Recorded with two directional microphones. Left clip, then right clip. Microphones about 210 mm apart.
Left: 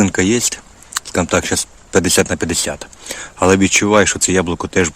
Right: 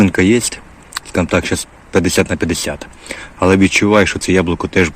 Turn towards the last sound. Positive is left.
turn(degrees=10)  # may be behind; listen again after turning